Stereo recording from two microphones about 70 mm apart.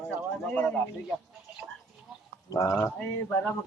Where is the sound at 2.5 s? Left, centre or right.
Left.